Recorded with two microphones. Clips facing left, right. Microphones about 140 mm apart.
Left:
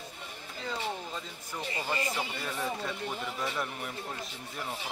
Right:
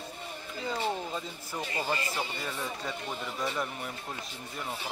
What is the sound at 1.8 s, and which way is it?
Speech, 30° right (ahead or behind).